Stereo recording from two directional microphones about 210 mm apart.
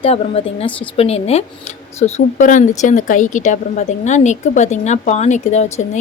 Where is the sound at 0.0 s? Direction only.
25° left (ahead or behind).